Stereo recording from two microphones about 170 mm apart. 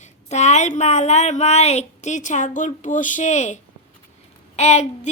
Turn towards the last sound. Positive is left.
turn(degrees=40)  # may be behind; listen again after turning